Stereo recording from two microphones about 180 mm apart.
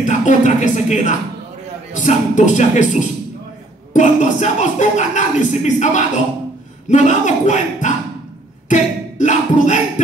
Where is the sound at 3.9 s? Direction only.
40° left (ahead or behind).